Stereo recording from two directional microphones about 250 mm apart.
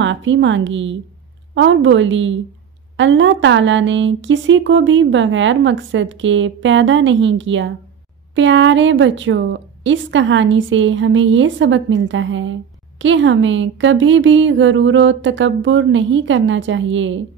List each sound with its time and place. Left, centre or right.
0.0 s speech: right